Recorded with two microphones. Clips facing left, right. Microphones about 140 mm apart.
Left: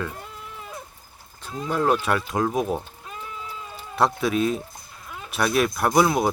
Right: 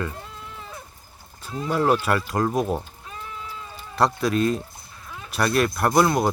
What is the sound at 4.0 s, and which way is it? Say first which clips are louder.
Speech: even; centre (ahead or behind).